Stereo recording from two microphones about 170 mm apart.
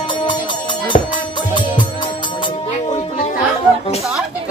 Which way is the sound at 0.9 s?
40° left (ahead or behind).